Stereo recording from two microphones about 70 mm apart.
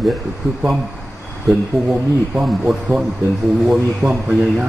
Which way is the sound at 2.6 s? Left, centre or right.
Centre.